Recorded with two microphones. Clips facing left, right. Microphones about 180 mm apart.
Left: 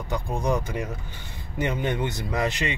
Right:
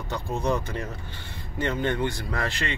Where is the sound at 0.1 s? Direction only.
15° left (ahead or behind).